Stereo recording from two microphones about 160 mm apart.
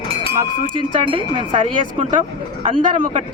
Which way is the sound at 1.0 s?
30° right (ahead or behind).